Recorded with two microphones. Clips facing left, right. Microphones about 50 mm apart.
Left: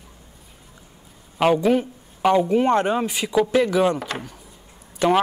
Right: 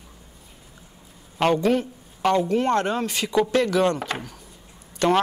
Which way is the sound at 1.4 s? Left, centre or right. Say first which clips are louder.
Left 2 dB; centre.